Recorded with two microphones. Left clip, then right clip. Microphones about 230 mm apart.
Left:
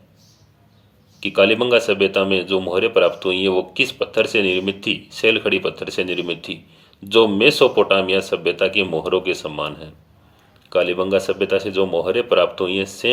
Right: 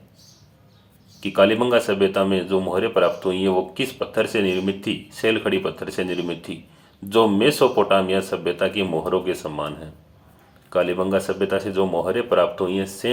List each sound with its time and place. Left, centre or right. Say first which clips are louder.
1.2 s speech: left 2 dB; left